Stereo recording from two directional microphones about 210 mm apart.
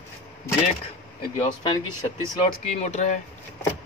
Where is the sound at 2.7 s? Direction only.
35° left (ahead or behind).